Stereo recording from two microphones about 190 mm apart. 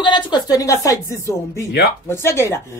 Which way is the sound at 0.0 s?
25° left (ahead or behind).